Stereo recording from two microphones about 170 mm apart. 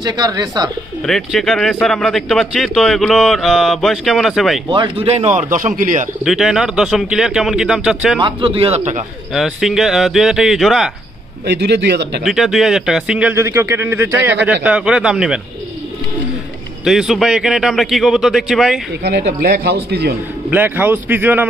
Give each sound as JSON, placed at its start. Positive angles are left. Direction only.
{"t": 0.0, "sound": "speech", "side_deg": -25}
{"t": 1.0, "sound": "speech", "side_deg": 0}
{"t": 4.6, "sound": "speech", "side_deg": -25}
{"t": 6.2, "sound": "speech", "side_deg": -5}
{"t": 8.2, "sound": "a man's voice", "side_deg": -30}
{"t": 9.3, "sound": "speech", "side_deg": 0}
{"t": 11.4, "sound": "a man's voice", "side_deg": -90}
{"t": 12.2, "sound": "speech", "side_deg": -5}
{"t": 16.8, "sound": "speech", "side_deg": 0}
{"t": 19.0, "sound": "speech", "side_deg": -75}
{"t": 20.4, "sound": "speech", "side_deg": -10}